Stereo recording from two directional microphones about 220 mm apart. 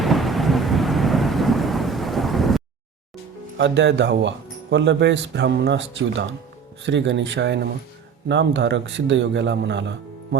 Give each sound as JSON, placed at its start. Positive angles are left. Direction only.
{"t": 0.0, "sound": "thunder", "side_deg": 0}
{"t": 3.6, "sound": "speech", "side_deg": -55}